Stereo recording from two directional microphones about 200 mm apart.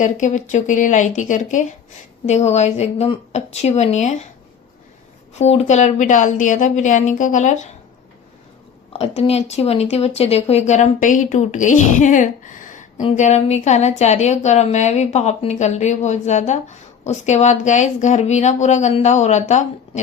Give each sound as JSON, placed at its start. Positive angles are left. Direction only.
{"t": 0.0, "sound": "speech", "side_deg": 40}
{"t": 5.3, "sound": "speech", "side_deg": 30}
{"t": 8.9, "sound": "speech", "side_deg": 30}